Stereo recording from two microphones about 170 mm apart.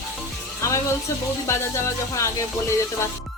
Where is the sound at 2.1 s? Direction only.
15° left (ahead or behind).